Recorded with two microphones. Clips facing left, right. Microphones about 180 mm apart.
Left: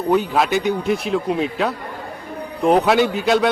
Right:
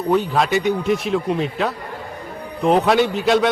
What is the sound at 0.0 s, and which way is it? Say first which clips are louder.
A man's voice: left 1 dB; centre (ahead or behind).